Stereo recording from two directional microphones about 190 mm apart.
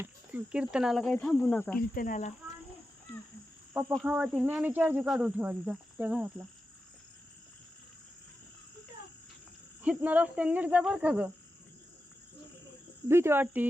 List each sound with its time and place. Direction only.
0.0 s speech: 10° right (ahead or behind)
1.1 s insect: 5° left (ahead or behind)
1.7 s cricket: 45° left (ahead or behind)
3.9 s cricket: 5° right (ahead or behind)
9.8 s cricket: 5° right (ahead or behind)
13.1 s cricket: 15° right (ahead or behind)